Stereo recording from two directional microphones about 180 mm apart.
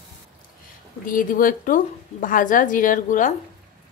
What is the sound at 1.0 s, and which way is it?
A woman's voice, 50° left (ahead or behind).